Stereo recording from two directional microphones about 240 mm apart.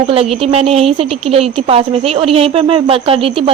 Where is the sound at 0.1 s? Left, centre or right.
Right.